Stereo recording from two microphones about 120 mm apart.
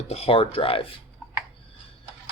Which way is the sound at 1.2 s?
10° right (ahead or behind).